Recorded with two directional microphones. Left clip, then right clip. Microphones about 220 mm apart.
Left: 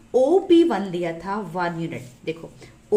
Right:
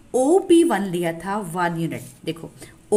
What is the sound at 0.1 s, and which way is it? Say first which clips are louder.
A woman's voice: even; 30° right (ahead or behind).